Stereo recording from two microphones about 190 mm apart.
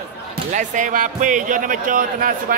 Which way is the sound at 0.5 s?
40° right (ahead or behind).